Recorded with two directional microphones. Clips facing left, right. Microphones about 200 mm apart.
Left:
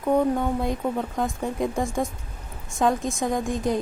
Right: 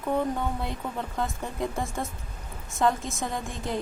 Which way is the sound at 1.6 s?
15° left (ahead or behind).